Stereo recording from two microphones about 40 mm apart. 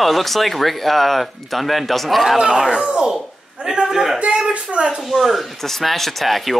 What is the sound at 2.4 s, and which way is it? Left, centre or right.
Speech, centre.